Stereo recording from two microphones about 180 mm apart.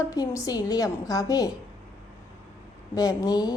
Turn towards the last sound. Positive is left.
turn(degrees=20)  # may be behind; listen again after turning